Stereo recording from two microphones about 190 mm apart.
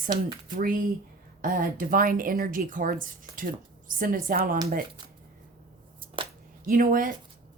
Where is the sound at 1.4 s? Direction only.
50° right (ahead or behind).